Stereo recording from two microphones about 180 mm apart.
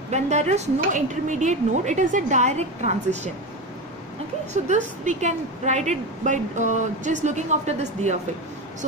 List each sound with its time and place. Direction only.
0.1 s a woman's voice: 40° right (ahead or behind)
4.6 s a woman's voice: 40° right (ahead or behind)